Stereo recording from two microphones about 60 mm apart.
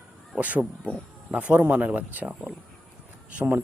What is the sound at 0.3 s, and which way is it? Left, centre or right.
Speech, right.